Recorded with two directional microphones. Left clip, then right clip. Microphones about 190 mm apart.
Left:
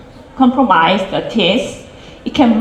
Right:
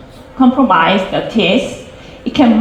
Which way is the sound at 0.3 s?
50° left (ahead or behind).